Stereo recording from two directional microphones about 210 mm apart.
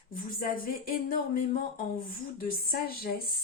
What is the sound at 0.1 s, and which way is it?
Speech, 45° left (ahead or behind).